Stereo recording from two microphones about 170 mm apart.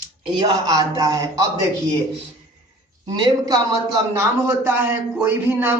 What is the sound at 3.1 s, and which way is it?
A man's voice, 25° right (ahead or behind).